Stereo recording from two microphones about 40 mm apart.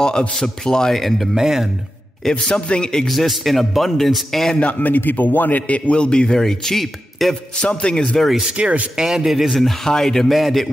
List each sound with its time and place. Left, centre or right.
0.4 s a man's voice: centre
1.0 s speech: centre
1.3 s speech: centre
2.5 s speech: left
3.1 s speech: centre
4.6 s a man's voice: left
6.4 s a man's voice: centre
6.8 s speech: centre
7.6 s speech: left
8.2 s a man's voice: centre
8.5 s speech: right
8.9 s speech: centre
10.2 s speech: centre